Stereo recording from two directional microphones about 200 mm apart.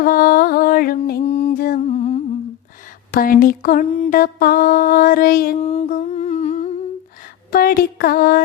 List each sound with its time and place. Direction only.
0.0 s music: 45° left (ahead or behind)
1.2 s music: 30° left (ahead or behind)
1.5 s music: 50° left (ahead or behind)
1.9 s humming: 30° left (ahead or behind)
3.1 s music: 45° left (ahead or behind)
5.5 s a sound: 30° left (ahead or behind)
5.9 s humming: 35° left (ahead or behind)
7.5 s music: 45° left (ahead or behind)